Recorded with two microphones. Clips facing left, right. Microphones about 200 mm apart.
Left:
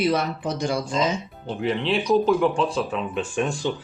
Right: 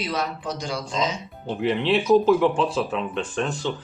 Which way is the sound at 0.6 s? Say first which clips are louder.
Left 7 dB; 55° left (ahead or behind).